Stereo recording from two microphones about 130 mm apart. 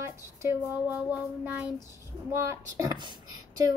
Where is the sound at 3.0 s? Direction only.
35° right (ahead or behind).